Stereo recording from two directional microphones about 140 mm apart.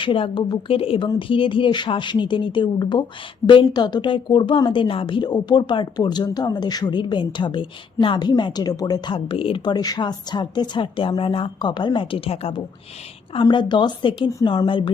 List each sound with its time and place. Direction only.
0.0 s a woman's voice: 35° left (ahead or behind)